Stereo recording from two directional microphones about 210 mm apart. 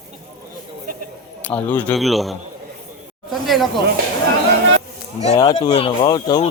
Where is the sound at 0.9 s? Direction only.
40° right (ahead or behind).